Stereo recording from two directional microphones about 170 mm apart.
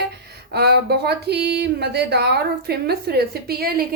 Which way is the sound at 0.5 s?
70° right (ahead or behind).